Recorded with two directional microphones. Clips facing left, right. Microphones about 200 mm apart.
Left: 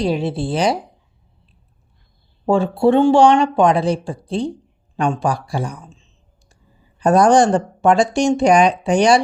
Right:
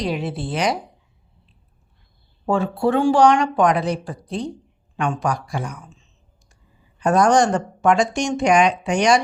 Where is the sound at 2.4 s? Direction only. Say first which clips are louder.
Left 5 dB; 30° left (ahead or behind).